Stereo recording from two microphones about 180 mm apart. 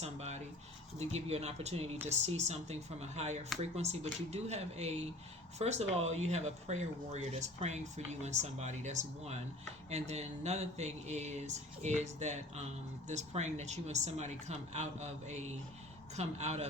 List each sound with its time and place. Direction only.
0.0 s speech: 35° right (ahead or behind)